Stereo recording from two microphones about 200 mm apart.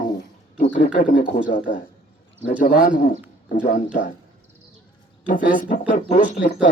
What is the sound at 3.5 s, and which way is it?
Speech, 40° left (ahead or behind).